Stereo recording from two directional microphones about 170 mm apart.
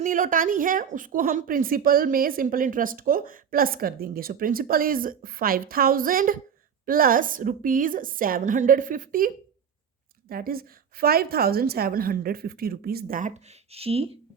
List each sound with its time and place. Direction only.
0.0 s a woman's voice: 50° right (ahead or behind); by 14.1 s 35° right (ahead or behind)